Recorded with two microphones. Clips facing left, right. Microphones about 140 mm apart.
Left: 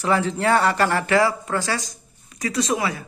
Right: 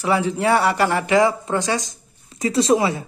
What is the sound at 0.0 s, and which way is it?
Speech, 10° right (ahead or behind).